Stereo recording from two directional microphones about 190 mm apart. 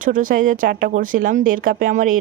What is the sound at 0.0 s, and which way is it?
Speech, 45° right (ahead or behind).